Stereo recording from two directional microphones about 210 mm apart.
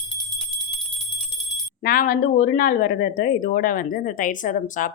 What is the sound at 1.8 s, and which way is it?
Speech, 45° left (ahead or behind).